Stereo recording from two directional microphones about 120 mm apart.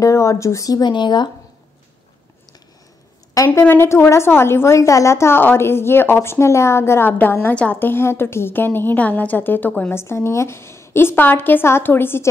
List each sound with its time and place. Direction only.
0.0 s a woman's voice: 25° left (ahead or behind)
3.4 s a woman's voice: 20° left (ahead or behind)